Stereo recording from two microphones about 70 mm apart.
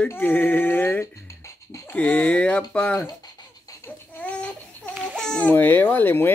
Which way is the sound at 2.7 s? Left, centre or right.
Centre.